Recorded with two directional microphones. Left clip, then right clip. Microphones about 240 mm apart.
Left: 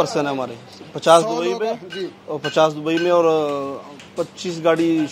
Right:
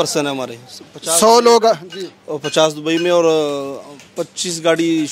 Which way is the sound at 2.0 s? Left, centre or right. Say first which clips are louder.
Right 2 dB; right.